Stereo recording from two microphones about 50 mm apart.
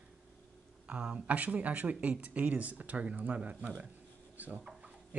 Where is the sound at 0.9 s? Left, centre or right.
Right.